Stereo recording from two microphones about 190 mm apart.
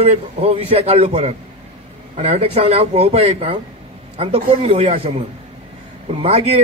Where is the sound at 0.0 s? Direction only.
35° right (ahead or behind).